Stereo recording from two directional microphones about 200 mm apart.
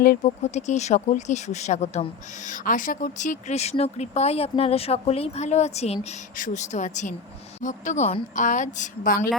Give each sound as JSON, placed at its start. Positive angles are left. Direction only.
{"t": 0.5, "sound": "speech", "side_deg": 35}